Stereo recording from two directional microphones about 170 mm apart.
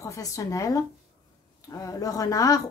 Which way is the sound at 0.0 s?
20° left (ahead or behind).